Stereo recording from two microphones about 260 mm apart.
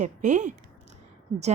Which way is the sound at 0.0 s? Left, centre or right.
Right.